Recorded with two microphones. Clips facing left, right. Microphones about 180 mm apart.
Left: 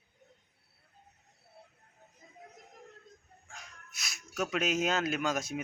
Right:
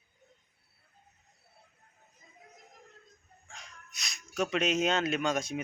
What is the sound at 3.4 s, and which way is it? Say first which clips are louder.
Speech: right 1 dB; centre (ahead or behind).